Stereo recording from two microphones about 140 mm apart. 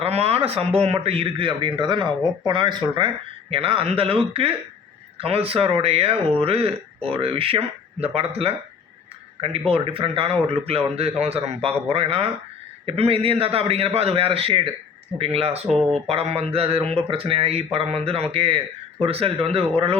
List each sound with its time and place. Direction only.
0.0 s speech: 45° right (ahead or behind)